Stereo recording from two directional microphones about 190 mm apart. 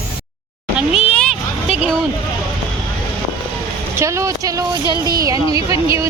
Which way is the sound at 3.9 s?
15° right (ahead or behind).